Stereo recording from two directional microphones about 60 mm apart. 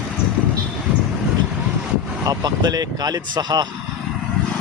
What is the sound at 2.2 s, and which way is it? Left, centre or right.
Speech, right.